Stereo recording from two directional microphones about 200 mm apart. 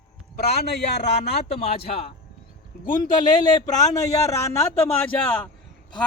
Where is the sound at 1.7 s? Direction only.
30° left (ahead or behind).